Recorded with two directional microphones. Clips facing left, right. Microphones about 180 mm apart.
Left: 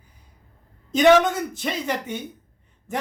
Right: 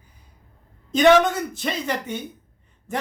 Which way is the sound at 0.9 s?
10° left (ahead or behind).